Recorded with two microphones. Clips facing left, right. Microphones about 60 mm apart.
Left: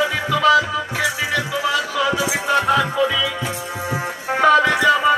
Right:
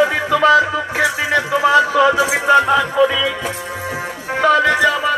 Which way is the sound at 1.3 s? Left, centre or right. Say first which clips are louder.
Right 6 dB; right.